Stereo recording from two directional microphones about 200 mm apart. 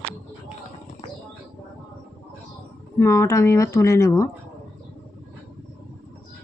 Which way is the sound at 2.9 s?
15° left (ahead or behind).